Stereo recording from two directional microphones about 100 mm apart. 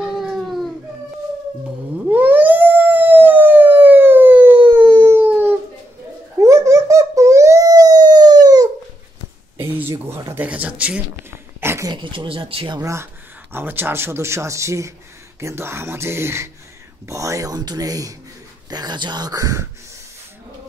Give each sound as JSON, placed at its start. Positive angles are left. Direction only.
{"t": 0.0, "sound": "baby cry", "side_deg": 0}
{"t": 2.0, "sound": "howl", "side_deg": -20}
{"t": 6.4, "sound": "dog", "side_deg": -30}
{"t": 9.6, "sound": "a sound", "side_deg": -25}
{"t": 11.2, "sound": "a sound", "side_deg": -25}
{"t": 11.9, "sound": "speech", "side_deg": -55}
{"t": 12.8, "sound": "speech", "side_deg": -25}